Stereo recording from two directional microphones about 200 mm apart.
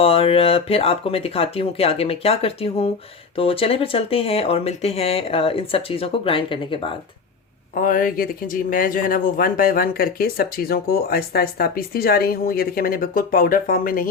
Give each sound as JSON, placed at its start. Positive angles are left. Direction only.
{"t": 0.0, "sound": "speech", "side_deg": 30}
{"t": 7.8, "sound": "speech", "side_deg": 45}